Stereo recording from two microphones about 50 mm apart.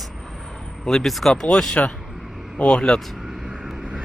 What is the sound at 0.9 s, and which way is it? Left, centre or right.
Speech, centre.